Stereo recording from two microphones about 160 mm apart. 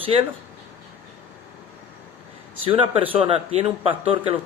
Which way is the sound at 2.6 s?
35° right (ahead or behind).